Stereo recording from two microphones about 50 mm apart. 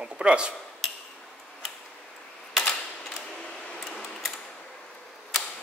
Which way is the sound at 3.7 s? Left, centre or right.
Centre.